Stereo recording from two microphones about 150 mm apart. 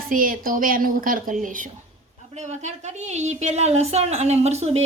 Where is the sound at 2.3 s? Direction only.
50° right (ahead or behind).